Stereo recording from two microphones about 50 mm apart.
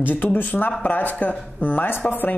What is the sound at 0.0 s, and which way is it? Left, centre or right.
Speech, left.